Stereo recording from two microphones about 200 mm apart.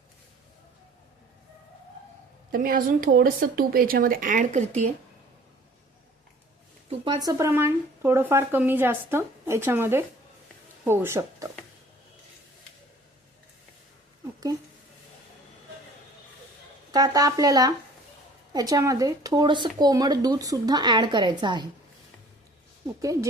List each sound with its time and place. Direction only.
2.5 s speech: 45° right (ahead or behind)
7.0 s speech: 20° right (ahead or behind)
16.9 s speech: 20° right (ahead or behind)